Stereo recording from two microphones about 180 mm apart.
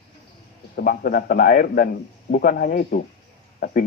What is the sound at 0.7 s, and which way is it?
Speech, 55° left (ahead or behind).